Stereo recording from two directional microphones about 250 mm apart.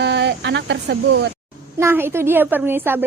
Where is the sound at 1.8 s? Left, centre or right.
Centre.